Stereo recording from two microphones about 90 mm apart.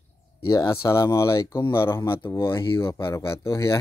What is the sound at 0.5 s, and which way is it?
Speech, 40° left (ahead or behind).